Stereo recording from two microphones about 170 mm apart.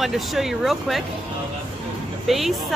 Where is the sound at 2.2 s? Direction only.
Centre (ahead or behind).